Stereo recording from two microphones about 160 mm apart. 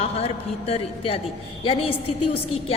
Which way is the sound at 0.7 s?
40° left (ahead or behind).